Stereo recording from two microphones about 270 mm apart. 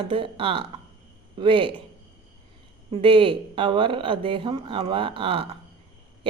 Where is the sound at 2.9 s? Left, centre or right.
Centre.